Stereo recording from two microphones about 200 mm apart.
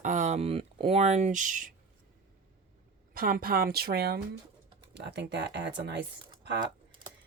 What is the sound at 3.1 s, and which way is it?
Speech, 45° right (ahead or behind).